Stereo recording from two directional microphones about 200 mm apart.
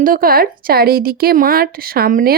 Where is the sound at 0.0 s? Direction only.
45° right (ahead or behind).